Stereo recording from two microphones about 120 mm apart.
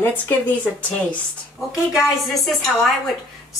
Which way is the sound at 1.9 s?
Centre (ahead or behind).